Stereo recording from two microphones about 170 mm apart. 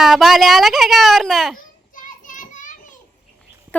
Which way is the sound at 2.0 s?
50° left (ahead or behind).